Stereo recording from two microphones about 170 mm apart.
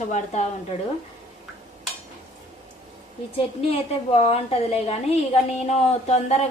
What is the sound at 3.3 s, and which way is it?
A woman's voice, 35° left (ahead or behind).